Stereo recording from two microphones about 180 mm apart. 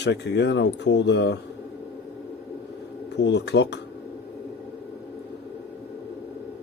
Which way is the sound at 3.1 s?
70° left (ahead or behind).